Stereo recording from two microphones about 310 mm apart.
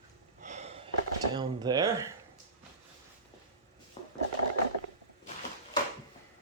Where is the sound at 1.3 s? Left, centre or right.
Centre.